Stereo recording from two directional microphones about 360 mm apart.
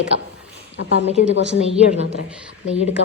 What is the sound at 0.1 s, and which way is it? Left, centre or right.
Speech, centre.